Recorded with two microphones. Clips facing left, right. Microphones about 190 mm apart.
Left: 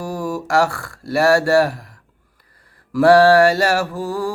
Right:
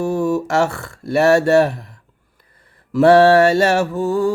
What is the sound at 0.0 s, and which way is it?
Speech, 25° right (ahead or behind).